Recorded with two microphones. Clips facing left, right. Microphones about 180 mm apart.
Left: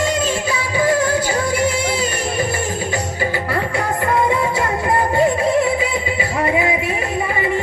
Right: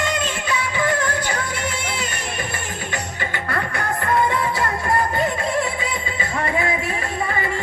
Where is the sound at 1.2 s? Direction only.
30° left (ahead or behind).